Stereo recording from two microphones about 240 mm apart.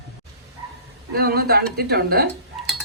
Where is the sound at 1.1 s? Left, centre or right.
Right.